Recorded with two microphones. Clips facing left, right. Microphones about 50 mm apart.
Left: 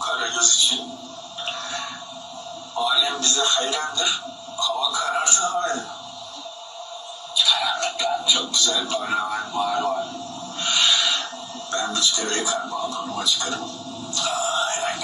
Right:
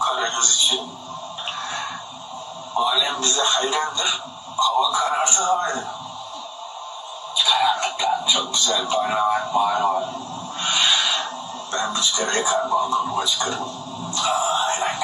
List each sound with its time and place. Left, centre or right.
0.0 s a man's voice: right
2.7 s a man's voice: right
7.3 s a man's voice: right
10.6 s owl: right
11.7 s a man's voice: right
14.1 s a sound: right